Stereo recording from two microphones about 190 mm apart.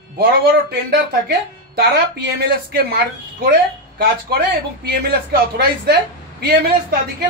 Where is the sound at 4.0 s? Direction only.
55° right (ahead or behind).